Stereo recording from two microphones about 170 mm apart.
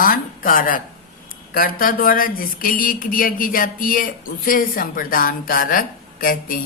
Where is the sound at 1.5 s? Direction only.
55° left (ahead or behind).